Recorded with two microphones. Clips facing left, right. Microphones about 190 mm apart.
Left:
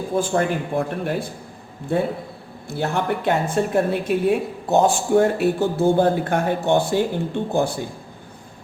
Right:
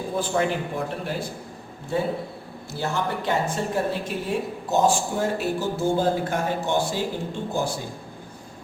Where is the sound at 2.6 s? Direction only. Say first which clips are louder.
Left 4 dB; 60° left (ahead or behind).